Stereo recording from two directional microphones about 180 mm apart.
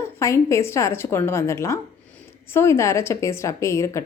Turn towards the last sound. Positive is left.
turn(degrees=15)  # may be behind; listen again after turning